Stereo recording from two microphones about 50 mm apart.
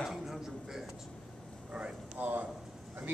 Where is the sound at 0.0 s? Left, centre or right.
Centre.